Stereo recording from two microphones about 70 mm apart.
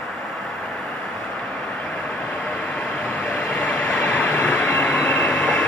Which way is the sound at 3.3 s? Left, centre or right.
Left.